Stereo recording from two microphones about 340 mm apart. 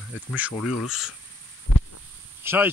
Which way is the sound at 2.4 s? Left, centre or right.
Centre.